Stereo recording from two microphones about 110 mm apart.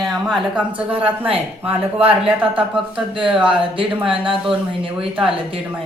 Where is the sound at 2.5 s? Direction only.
50° right (ahead or behind).